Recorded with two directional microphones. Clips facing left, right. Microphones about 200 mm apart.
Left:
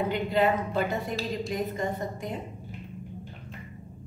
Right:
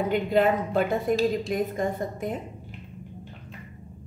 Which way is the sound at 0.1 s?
50° right (ahead or behind).